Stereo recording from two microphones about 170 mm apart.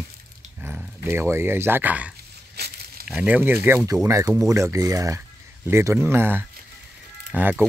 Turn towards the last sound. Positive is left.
turn(degrees=-10)  # may be behind; listen again after turning